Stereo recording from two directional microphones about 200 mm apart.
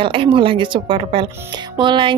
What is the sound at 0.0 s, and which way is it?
Speech, 25° right (ahead or behind).